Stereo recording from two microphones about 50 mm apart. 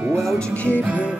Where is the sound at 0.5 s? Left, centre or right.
Left.